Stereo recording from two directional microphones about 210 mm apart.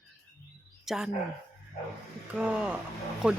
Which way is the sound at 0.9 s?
Centre (ahead or behind).